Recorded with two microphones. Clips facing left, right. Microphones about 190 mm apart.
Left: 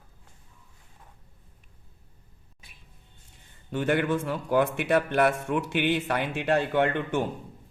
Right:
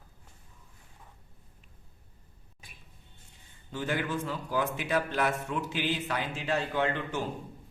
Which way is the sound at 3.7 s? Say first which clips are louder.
Left 7 dB; 65° left (ahead or behind).